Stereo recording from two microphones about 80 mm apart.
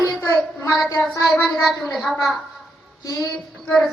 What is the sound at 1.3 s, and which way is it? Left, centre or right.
A woman's voice, centre.